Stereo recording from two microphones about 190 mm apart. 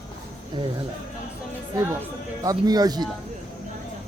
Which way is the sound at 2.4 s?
20° right (ahead or behind).